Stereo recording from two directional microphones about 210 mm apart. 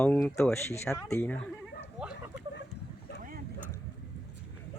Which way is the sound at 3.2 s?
40° right (ahead or behind).